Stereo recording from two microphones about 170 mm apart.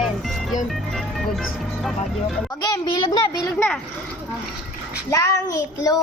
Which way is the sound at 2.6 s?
20° left (ahead or behind).